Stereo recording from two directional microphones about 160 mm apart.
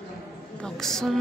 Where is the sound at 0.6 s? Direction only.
5° left (ahead or behind).